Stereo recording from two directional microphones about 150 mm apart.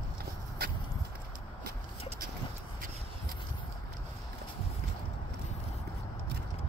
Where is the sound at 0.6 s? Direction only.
90° right.